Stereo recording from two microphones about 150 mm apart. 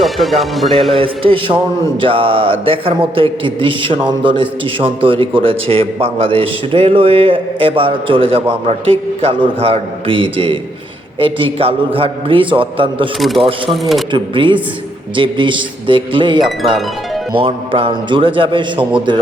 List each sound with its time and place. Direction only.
0.0 s speech: centre (ahead or behind)
0.9 s speech: 35° right (ahead or behind)
13.1 s speech: centre (ahead or behind)
14.1 s speech: 35° right (ahead or behind)